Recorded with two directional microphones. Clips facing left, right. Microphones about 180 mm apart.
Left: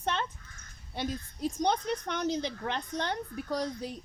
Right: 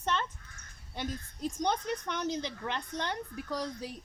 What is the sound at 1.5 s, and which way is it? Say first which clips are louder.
Speech: left 2 dB; 60° left (ahead or behind).